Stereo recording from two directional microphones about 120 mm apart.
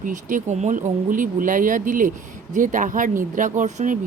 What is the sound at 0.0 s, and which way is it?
Speech, 90° right.